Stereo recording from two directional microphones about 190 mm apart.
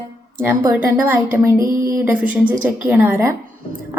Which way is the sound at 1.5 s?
45° right (ahead or behind).